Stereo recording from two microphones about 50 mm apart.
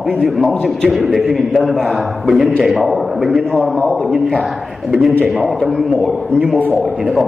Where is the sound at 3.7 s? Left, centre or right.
Left.